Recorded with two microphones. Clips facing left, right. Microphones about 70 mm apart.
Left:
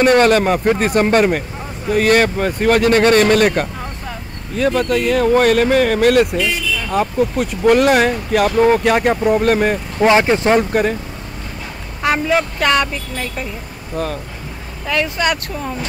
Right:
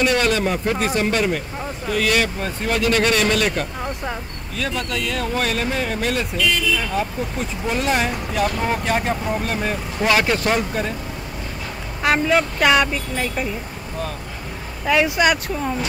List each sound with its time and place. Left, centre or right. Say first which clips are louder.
0.0 s speech: left 7 dB; left
10.0 s speech: left 6 dB; left
10.7 s speech: left 8 dB; left
12.0 s speech: left 1 dB; centre
14.9 s speech: right 1 dB; centre
15.4 s speech: right 1 dB; centre